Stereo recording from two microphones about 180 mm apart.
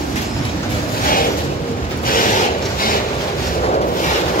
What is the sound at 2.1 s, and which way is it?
Rub, 50° left (ahead or behind).